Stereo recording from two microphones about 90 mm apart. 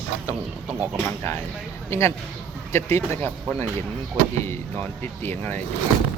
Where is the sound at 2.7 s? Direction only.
30° left (ahead or behind).